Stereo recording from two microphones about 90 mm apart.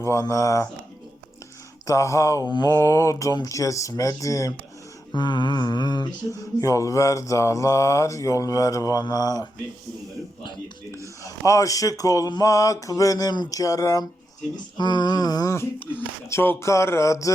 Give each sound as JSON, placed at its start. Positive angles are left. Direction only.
{"t": 0.0, "sound": "mantra", "side_deg": 35}
{"t": 1.9, "sound": "mantra", "side_deg": 35}
{"t": 2.5, "sound": "mantra", "side_deg": 50}
{"t": 5.1, "sound": "mantra", "side_deg": 55}
{"t": 6.6, "sound": "mantra", "side_deg": 35}
{"t": 11.2, "sound": "mantra", "side_deg": 35}
{"t": 14.8, "sound": "a sound", "side_deg": 55}
{"t": 15.5, "sound": "mantra", "side_deg": 25}